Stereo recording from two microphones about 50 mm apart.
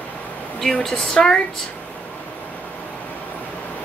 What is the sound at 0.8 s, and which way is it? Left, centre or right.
Speech, centre.